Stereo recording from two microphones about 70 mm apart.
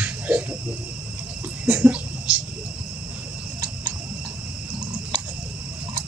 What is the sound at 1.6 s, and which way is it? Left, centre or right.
Speech, centre.